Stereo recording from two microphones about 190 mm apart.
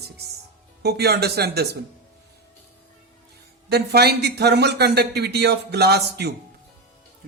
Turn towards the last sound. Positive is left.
turn(degrees=-55)  # may be behind; listen again after turning